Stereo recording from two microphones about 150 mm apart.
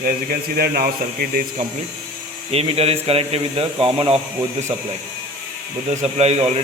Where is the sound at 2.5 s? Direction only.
40° right (ahead or behind).